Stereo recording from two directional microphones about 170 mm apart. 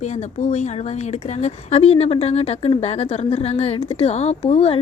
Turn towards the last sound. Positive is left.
turn(degrees=35)  # may be behind; listen again after turning